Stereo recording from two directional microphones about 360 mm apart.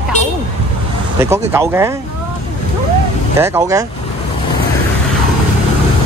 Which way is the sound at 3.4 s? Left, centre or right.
Centre.